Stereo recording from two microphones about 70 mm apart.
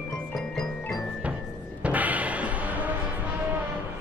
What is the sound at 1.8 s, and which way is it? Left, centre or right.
Music, right.